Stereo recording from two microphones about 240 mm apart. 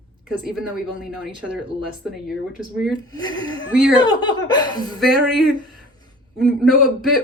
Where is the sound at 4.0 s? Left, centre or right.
Centre.